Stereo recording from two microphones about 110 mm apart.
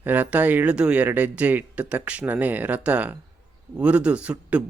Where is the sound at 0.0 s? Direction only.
15° right (ahead or behind).